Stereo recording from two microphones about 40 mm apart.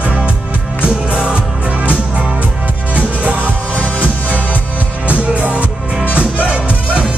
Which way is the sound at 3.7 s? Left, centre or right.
Left.